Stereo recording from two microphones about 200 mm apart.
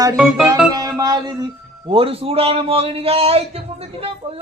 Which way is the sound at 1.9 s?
25° right (ahead or behind).